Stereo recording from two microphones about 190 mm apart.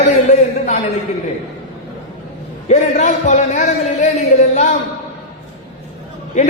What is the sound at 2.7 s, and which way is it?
A man's voice, 35° left (ahead or behind).